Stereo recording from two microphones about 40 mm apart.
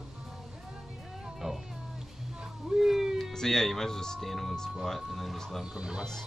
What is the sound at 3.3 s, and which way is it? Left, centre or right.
Music, centre.